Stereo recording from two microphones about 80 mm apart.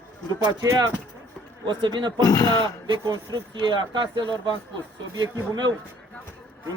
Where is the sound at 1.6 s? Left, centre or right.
Right.